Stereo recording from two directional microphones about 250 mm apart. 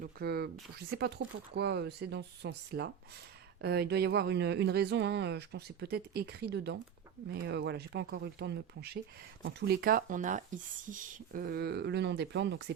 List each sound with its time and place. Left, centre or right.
0.0 s speech: right